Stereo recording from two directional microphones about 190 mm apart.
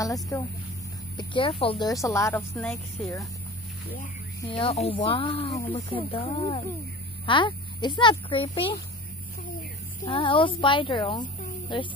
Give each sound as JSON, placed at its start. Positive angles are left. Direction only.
{"t": 0.0, "sound": "speech", "side_deg": 20}
{"t": 2.5, "sound": "speech", "side_deg": 5}
{"t": 4.5, "sound": "speech", "side_deg": 30}
{"t": 10.0, "sound": "speech", "side_deg": 25}